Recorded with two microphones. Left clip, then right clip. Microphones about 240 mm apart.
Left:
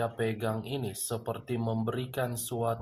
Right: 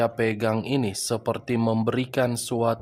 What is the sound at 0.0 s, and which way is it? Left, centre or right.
Speech, right.